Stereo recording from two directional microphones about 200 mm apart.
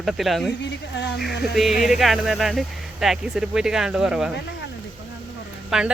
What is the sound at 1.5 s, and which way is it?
Speech, centre (ahead or behind).